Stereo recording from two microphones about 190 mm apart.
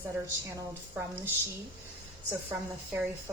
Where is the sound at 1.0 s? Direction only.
10° right (ahead or behind).